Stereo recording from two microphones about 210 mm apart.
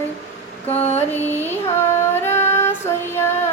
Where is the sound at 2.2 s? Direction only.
10° left (ahead or behind).